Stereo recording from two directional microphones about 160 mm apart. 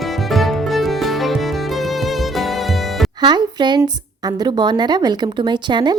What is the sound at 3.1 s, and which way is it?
A woman's voice, 25° right (ahead or behind).